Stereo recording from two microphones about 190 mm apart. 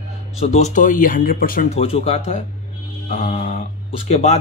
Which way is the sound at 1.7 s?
30° left (ahead or behind).